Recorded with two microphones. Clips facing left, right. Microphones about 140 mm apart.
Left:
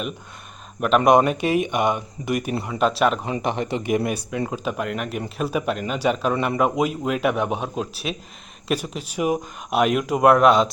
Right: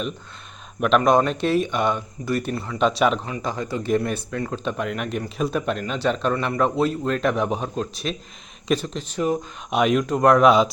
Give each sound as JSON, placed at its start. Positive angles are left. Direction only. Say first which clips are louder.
{"t": 0.8, "sound": "speech", "louder": "left 1 dB", "side_deg": 5}
{"t": 2.7, "sound": "speech", "louder": "even", "side_deg": 5}
{"t": 3.2, "sound": "speech", "louder": "left 3 dB", "side_deg": 25}